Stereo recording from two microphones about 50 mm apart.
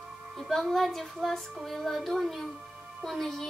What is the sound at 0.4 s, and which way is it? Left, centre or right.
Speech, centre.